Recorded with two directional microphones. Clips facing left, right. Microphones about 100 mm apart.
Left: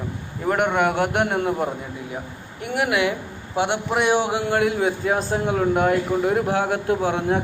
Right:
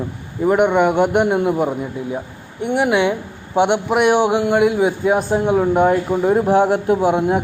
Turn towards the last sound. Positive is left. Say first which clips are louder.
# right 5 dB
turn(degrees=-15)  # may be behind; listen again after turning